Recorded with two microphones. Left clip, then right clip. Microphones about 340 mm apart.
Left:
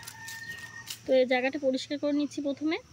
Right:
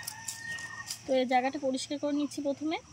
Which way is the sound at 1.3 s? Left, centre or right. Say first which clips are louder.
Left 1 dB; centre.